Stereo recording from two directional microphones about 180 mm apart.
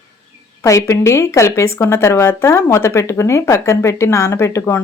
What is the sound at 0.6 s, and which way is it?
A woman's voice, 15° left (ahead or behind).